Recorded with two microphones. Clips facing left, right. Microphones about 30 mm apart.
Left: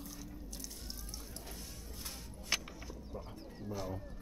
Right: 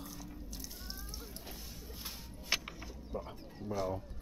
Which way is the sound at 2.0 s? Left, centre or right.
Centre.